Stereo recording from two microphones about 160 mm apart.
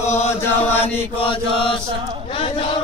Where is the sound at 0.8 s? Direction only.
35° left (ahead or behind).